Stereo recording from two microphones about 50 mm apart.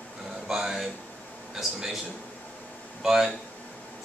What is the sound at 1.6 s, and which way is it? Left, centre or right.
Speech, centre.